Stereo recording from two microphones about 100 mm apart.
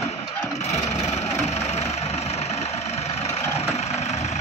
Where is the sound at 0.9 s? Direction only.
90° left.